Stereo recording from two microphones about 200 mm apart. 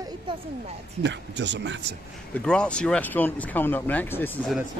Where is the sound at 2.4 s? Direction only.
5° left (ahead or behind).